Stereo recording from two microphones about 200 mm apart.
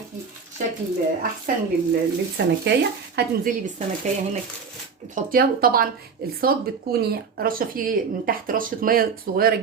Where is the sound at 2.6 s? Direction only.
55° right (ahead or behind).